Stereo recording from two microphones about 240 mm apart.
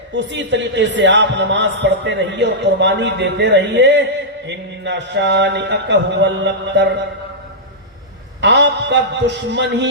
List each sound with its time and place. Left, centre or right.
0.1 s a man's voice: right
8.4 s a man's voice: right